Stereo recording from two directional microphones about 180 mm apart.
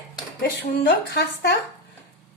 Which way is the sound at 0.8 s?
65° left (ahead or behind).